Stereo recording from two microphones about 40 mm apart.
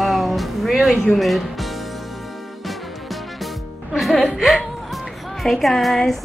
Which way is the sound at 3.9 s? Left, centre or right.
Centre.